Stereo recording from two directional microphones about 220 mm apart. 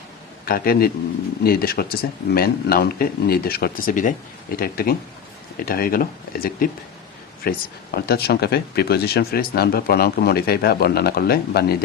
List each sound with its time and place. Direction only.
0.4 s speech: 45° left (ahead or behind)